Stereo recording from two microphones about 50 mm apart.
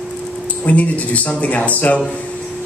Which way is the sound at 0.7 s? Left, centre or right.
Left.